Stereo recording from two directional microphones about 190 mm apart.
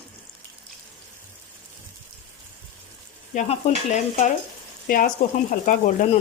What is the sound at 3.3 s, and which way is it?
Stir, 40° left (ahead or behind).